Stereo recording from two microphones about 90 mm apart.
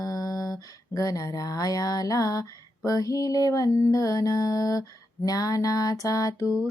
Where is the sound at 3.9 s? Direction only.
45° left (ahead or behind).